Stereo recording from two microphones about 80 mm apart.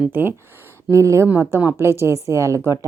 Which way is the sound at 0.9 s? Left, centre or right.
Right.